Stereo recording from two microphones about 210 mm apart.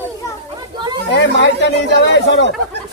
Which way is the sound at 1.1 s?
55° left (ahead or behind).